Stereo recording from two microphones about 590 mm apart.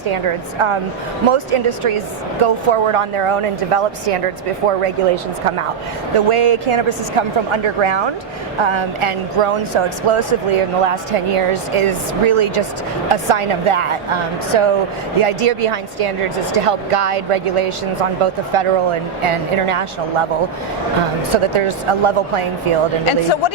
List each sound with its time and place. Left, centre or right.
0.1 s speech: right
6.1 s a woman's voice: right
21.3 s speech: right
23.0 s speech: left